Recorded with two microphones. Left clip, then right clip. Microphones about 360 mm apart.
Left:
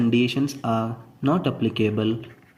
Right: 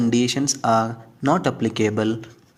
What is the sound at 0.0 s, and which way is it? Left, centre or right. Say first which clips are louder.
Speech: right 1 dB; right.